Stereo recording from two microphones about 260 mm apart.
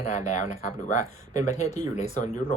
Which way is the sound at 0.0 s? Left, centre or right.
Left.